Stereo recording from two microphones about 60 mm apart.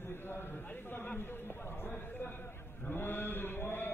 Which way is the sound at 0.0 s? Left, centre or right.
Left.